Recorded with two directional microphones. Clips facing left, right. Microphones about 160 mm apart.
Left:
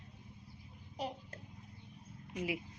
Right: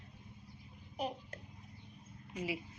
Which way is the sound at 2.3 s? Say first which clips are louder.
Left 1 dB; 10° left (ahead or behind).